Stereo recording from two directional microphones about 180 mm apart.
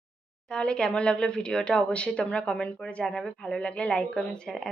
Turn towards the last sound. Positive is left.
turn(degrees=5)  # may be behind; listen again after turning